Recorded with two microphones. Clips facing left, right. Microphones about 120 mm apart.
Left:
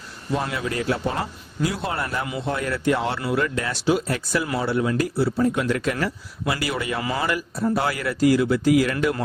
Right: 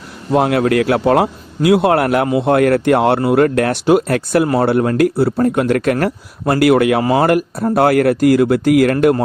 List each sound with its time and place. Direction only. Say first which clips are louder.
0.3 s a man's voice: right 12 dB; 65° right (ahead or behind)